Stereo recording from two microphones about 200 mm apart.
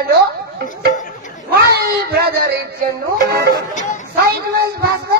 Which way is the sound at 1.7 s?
55° right (ahead or behind).